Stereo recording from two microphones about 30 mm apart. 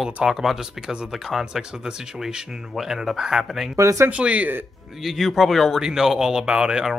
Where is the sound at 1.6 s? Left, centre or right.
Right.